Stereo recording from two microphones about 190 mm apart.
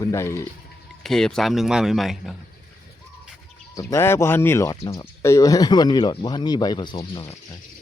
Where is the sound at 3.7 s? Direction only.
15° left (ahead or behind); by 7.3 s 30° left (ahead or behind).